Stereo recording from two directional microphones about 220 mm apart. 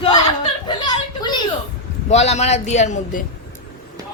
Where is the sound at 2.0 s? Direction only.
30° left (ahead or behind).